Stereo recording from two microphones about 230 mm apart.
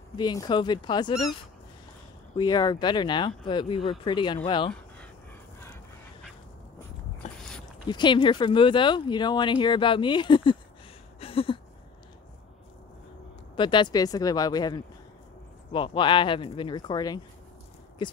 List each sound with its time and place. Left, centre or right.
0.1 s speech: centre
2.3 s speech: centre
7.2 s dog: left
7.9 s speech: centre
11.1 s a sound: left
13.6 s speech: centre